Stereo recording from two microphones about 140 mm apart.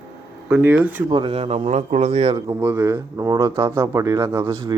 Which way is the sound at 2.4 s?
20° right (ahead or behind).